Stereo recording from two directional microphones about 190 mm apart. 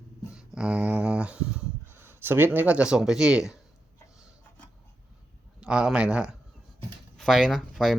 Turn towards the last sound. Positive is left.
turn(degrees=0)  # may be behind; listen again after turning